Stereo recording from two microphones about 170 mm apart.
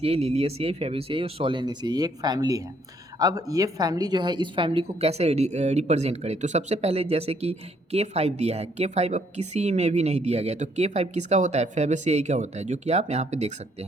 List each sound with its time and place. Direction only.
0.0 s a woman's voice: 35° right (ahead or behind)